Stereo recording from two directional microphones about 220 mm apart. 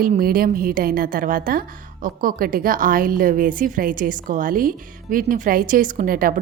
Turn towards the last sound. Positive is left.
turn(degrees=-40)  # may be behind; listen again after turning